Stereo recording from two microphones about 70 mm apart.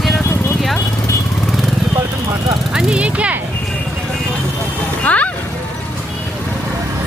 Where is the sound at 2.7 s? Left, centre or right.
Centre.